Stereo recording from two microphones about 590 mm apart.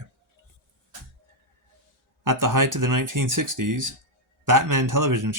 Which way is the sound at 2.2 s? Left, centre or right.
Right.